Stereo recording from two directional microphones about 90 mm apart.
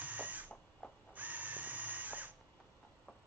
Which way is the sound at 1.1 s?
20° right (ahead or behind).